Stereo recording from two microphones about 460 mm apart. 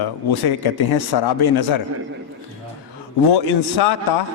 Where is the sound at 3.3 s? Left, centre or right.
Left.